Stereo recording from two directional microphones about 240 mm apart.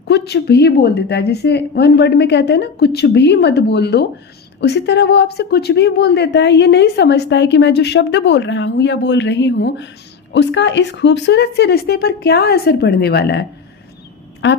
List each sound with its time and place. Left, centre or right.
0.1 s speech: left
14.4 s speech: left